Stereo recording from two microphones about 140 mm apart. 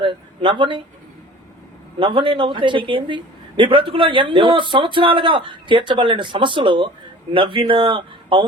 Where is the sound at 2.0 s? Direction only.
40° right (ahead or behind).